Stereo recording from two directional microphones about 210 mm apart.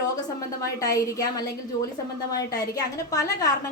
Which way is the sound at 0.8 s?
15° left (ahead or behind).